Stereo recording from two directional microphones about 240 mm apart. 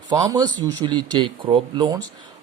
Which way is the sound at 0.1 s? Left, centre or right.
Centre.